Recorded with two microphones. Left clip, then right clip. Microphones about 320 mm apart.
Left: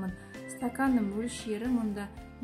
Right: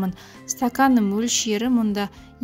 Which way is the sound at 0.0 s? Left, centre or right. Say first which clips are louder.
Right 9 dB; right.